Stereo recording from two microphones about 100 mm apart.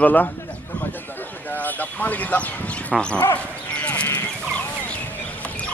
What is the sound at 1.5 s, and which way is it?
Speech, 15° left (ahead or behind).